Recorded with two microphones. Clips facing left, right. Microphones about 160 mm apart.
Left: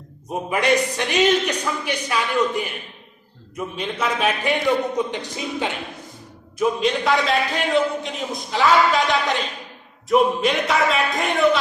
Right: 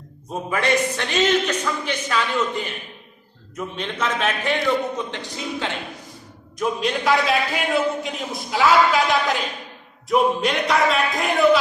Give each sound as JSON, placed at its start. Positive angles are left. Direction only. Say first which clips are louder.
{"t": 0.3, "sound": "a man's voice", "louder": "left 2 dB", "side_deg": 20}
{"t": 3.8, "sound": "a man's voice", "louder": "left 1 dB", "side_deg": 10}
{"t": 6.6, "sound": "a man's voice", "louder": "left 3 dB", "side_deg": 0}